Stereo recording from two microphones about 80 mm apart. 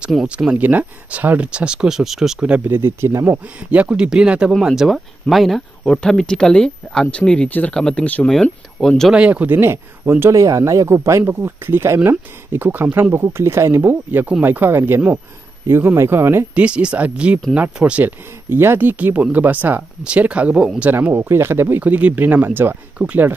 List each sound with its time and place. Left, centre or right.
0.3 s speech: centre
2.4 s speech: centre
2.7 s speech: right
3.3 s speech: centre; by 7.7 s left
7.7 s speech: centre
8.8 s speech: centre
9.1 s speech: centre
10.3 s speech: right
16.5 s speech: centre
20.9 s speech: right